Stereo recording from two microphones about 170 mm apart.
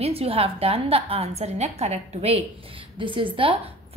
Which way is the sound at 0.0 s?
35° right (ahead or behind).